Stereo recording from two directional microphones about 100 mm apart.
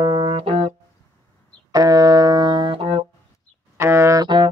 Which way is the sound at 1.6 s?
40° right (ahead or behind).